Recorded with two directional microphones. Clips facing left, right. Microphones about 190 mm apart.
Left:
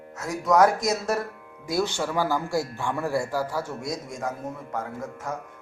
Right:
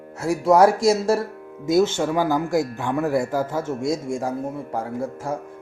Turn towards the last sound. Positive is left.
turn(degrees=-30)  # may be behind; listen again after turning